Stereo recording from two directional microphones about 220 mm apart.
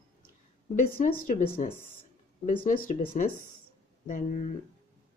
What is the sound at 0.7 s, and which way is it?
Speech, 40° left (ahead or behind).